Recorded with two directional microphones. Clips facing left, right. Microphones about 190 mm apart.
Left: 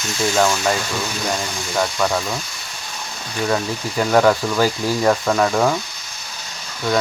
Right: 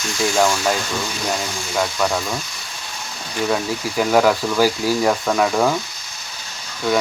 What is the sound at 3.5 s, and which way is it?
Speech, 5° right (ahead or behind).